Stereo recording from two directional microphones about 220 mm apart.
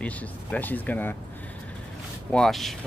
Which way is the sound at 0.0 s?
5° left (ahead or behind).